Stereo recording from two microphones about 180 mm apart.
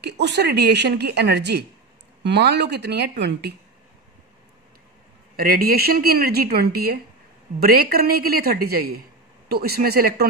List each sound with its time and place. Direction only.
0.0 s a woman's voice: 70° right (ahead or behind)
5.3 s a woman's voice: 55° right (ahead or behind)